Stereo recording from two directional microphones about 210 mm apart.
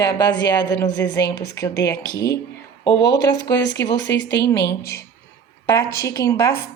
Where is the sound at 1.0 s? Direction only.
55° left (ahead or behind).